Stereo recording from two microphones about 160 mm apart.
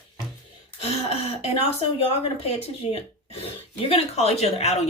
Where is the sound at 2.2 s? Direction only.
40° left (ahead or behind).